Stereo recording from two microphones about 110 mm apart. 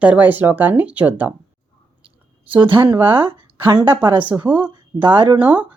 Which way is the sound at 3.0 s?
15° right (ahead or behind).